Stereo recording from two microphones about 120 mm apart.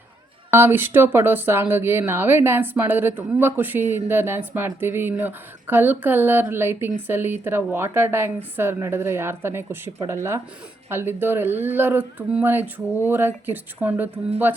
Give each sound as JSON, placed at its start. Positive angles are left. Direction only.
{"t": 0.5, "sound": "a woman's voice", "side_deg": -20}